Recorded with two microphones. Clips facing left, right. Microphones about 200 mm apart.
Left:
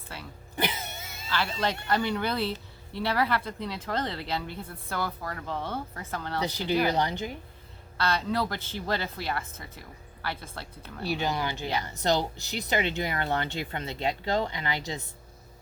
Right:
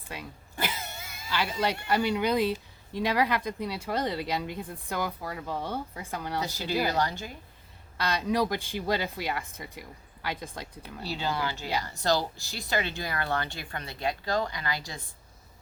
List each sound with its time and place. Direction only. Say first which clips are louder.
0.1 s cough: right 2 dB; 15° right (ahead or behind)
0.5 s cough: left 3 dB; 20° left (ahead or behind)
1.3 s a woman's voice: even; 10° right (ahead or behind)
6.9 s speech: left 1 dB; 20° left (ahead or behind)
7.9 s a woman's voice: right 1 dB; 15° right (ahead or behind)
11.1 s speech: left 2 dB; 15° left (ahead or behind)